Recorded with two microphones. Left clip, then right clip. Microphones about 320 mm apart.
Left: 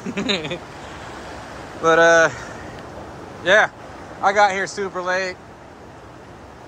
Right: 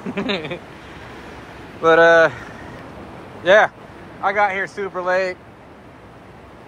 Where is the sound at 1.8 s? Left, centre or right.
Centre.